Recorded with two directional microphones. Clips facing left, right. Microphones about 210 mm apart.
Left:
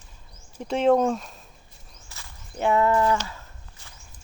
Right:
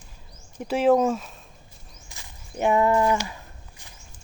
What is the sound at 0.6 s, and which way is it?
Speech, 5° right (ahead or behind).